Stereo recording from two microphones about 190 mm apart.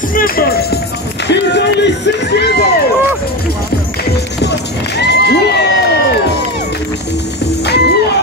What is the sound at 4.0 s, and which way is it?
Run, 65° left (ahead or behind).